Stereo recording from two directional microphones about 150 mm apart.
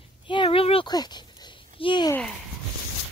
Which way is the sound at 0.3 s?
35° left (ahead or behind).